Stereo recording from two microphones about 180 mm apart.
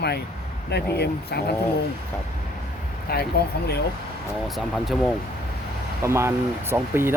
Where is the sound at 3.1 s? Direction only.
60° left (ahead or behind).